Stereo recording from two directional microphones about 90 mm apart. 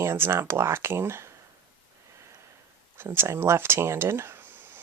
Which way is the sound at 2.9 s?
25° right (ahead or behind).